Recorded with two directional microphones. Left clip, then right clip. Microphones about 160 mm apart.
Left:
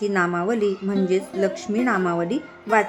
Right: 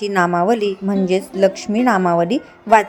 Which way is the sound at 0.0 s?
40° right (ahead or behind).